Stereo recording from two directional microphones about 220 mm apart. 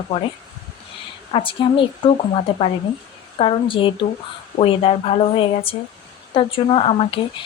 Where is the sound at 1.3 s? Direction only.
25° left (ahead or behind).